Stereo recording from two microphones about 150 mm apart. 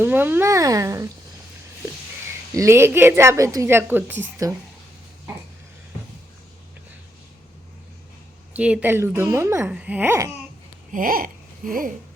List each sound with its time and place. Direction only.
0.0 s speech: 10° right (ahead or behind)
2.6 s a woman's voice: 15° right (ahead or behind)
8.5 s a woman's voice: 10° right (ahead or behind)
10.9 s babbling: 70° right (ahead or behind)